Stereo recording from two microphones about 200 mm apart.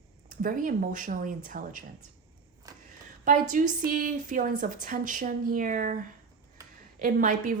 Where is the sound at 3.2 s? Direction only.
40° right (ahead or behind).